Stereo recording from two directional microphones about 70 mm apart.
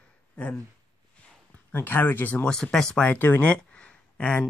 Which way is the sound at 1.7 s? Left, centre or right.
Left.